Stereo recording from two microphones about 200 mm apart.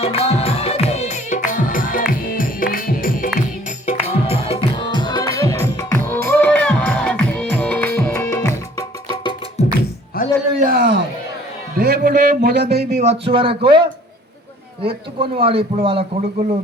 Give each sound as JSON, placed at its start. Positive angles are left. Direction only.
{"t": 0.0, "sound": "music", "side_deg": 30}
{"t": 3.8, "sound": "music", "side_deg": 30}
{"t": 10.1, "sound": "a sound", "side_deg": 50}
{"t": 10.6, "sound": "a sound", "side_deg": -45}
{"t": 11.8, "sound": "a man's voice", "side_deg": -50}
{"t": 13.0, "sound": "a man's voice", "side_deg": -30}
{"t": 14.8, "sound": "a man's voice", "side_deg": -30}